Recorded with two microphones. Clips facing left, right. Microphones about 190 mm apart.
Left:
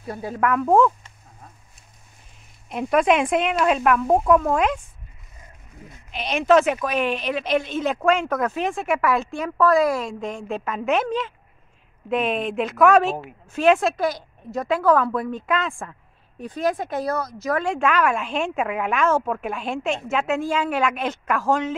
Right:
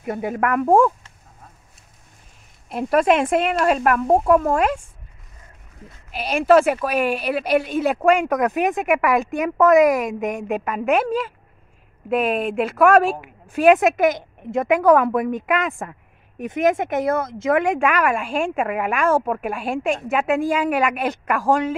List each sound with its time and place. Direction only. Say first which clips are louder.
0.0 s speech: right 6 dB; 20° right (ahead or behind)
2.7 s a woman's voice: right 1 dB; centre (ahead or behind)
5.8 s speech: even; 10° left (ahead or behind)
6.1 s a woman's voice: right 2 dB; 10° right (ahead or behind)